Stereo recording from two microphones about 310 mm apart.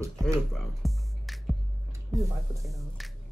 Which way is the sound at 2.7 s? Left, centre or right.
Centre.